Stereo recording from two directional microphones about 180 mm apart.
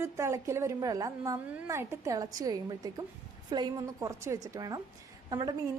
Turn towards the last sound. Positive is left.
turn(degrees=-20)  # may be behind; listen again after turning